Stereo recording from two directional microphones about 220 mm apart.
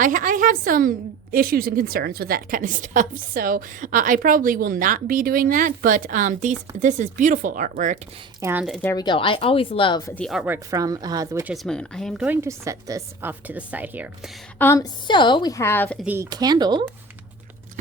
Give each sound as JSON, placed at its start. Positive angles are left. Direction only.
{"t": 0.0, "sound": "a woman's voice", "side_deg": -40}
{"t": 8.4, "sound": "speech", "side_deg": -10}
{"t": 8.6, "sound": "speech", "side_deg": 0}
{"t": 8.9, "sound": "speech", "side_deg": 20}
{"t": 10.2, "sound": "a woman's voice", "side_deg": 0}
{"t": 11.5, "sound": "a woman's voice", "side_deg": 0}
{"t": 14.6, "sound": "a woman's voice", "side_deg": 15}
{"t": 16.0, "sound": "a woman's voice", "side_deg": -10}